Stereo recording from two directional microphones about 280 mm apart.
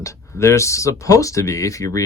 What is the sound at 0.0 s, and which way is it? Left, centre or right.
Speech, centre.